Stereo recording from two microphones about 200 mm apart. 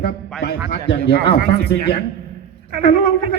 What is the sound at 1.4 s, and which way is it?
Speech, 55° right (ahead or behind).